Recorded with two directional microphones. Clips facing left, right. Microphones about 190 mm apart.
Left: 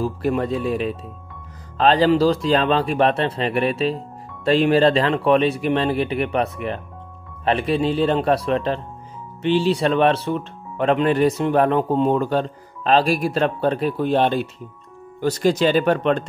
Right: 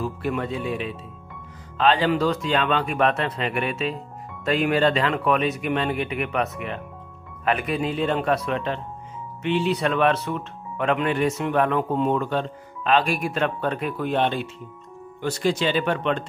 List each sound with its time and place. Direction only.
0.0 s speech: 35° left (ahead or behind)